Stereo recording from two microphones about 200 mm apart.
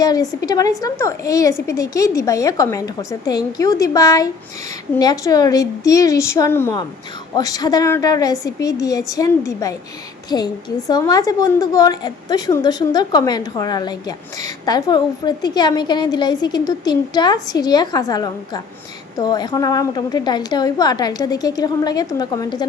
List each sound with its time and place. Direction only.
0.0 s a woman's voice: 20° left (ahead or behind)